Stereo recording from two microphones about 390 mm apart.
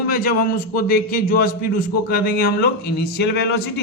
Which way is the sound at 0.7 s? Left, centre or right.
Left.